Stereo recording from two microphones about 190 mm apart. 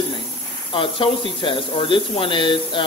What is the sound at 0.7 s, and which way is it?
Speech, 25° left (ahead or behind).